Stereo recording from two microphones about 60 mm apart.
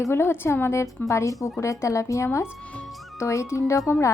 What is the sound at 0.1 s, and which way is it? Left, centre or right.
A woman's voice, left.